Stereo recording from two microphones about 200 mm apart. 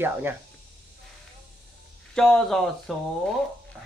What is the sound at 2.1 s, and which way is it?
Speech, 5° left (ahead or behind).